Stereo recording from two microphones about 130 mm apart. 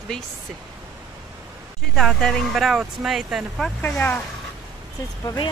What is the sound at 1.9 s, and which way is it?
Speech, centre (ahead or behind).